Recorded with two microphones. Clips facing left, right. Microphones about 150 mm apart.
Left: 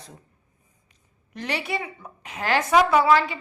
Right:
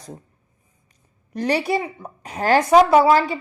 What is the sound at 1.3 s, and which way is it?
Speech, 40° right (ahead or behind).